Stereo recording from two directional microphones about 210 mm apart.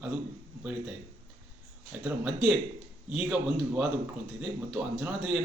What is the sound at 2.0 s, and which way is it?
Speech, 5° right (ahead or behind).